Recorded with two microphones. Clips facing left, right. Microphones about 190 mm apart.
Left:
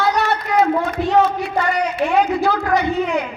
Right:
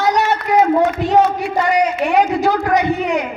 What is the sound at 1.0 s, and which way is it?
Speech, 15° right (ahead or behind).